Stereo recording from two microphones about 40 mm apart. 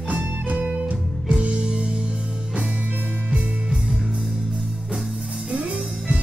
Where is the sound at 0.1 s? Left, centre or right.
Right.